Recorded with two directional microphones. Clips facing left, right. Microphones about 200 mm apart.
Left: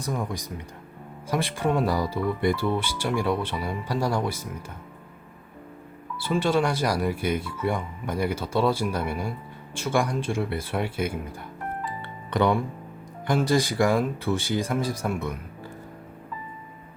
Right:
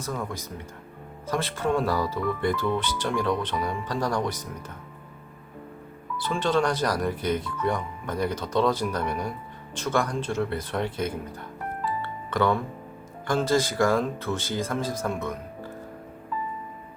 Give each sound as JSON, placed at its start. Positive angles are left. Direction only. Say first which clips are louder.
{"t": 0.0, "sound": "speech", "louder": "left 2 dB", "side_deg": 15}
{"t": 6.1, "sound": "speech", "louder": "left 1 dB", "side_deg": 10}
{"t": 11.9, "sound": "music", "louder": "right 2 dB", "side_deg": 15}
{"t": 13.2, "sound": "speech", "louder": "left 1 dB", "side_deg": 15}